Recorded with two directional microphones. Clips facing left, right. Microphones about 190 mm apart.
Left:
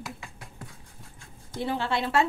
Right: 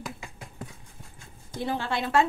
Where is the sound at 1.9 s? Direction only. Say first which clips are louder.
Left 1 dB; 25° left (ahead or behind).